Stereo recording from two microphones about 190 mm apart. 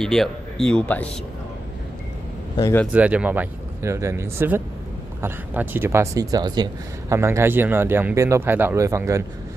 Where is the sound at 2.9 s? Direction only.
5° right (ahead or behind).